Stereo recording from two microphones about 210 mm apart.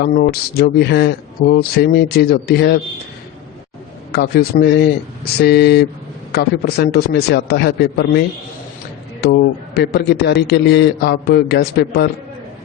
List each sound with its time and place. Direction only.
0.0 s a man's voice: 50° left (ahead or behind)
4.1 s a man's voice: 50° left (ahead or behind)
9.2 s a man's voice: 55° left (ahead or behind)